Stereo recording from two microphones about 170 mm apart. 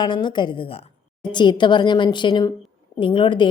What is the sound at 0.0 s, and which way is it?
Speech, 25° left (ahead or behind).